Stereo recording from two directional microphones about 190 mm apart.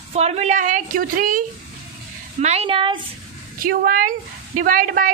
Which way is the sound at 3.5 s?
50° right (ahead or behind).